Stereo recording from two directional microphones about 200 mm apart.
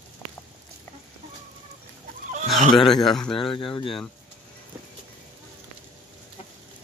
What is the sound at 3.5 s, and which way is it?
Speech, 25° left (ahead or behind).